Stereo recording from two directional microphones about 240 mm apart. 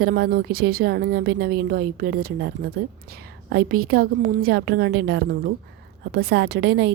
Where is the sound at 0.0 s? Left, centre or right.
Right.